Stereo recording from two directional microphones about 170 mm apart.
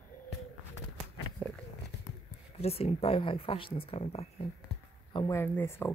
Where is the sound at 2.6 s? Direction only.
35° left (ahead or behind).